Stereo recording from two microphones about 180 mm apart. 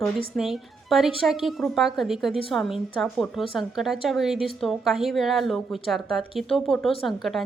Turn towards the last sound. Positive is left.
turn(degrees=0)  # may be behind; listen again after turning